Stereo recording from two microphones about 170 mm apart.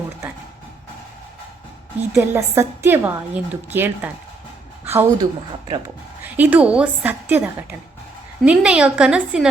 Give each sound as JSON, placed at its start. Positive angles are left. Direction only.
{"t": 2.1, "sound": "a woman's voice", "side_deg": -15}
{"t": 6.2, "sound": "a woman's voice", "side_deg": -10}